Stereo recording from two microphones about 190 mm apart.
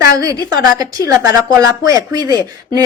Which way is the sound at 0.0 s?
20° right (ahead or behind).